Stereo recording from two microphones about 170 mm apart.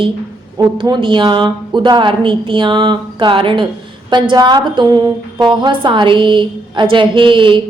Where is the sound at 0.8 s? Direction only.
30° right (ahead or behind).